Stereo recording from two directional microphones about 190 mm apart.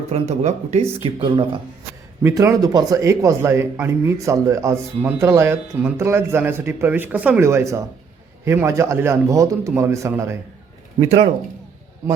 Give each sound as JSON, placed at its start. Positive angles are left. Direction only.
{"t": 0.1, "sound": "speech", "side_deg": -35}
{"t": 2.2, "sound": "a man's voice", "side_deg": -15}
{"t": 11.0, "sound": "speech", "side_deg": -35}